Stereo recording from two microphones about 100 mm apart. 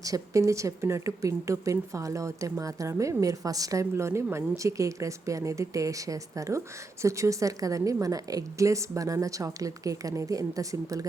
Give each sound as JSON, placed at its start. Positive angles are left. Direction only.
{"t": 0.0, "sound": "speech", "side_deg": -35}